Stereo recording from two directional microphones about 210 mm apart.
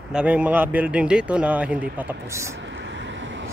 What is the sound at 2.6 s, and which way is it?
Vehicle, 60° right (ahead or behind).